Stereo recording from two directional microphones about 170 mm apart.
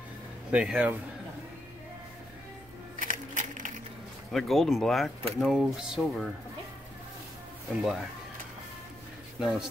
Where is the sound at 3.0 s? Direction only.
50° right (ahead or behind).